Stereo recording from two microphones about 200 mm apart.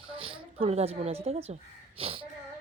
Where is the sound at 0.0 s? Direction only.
25° right (ahead or behind).